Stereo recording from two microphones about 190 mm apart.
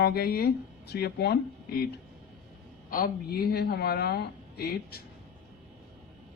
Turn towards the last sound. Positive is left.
turn(degrees=55)  # may be behind; listen again after turning